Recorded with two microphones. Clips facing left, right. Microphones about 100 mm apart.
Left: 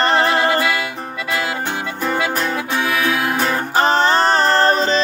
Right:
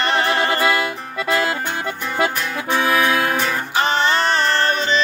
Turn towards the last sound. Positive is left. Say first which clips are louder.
# left 4 dB
turn(degrees=35)  # may be behind; listen again after turning